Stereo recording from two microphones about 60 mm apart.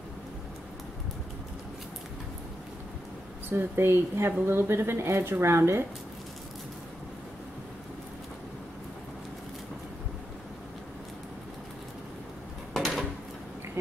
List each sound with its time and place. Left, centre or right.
3.4 s speech: right
12.7 s drawer open or close: centre